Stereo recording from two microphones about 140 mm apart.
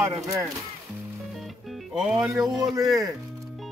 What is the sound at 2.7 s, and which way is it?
Music, 25° right (ahead or behind).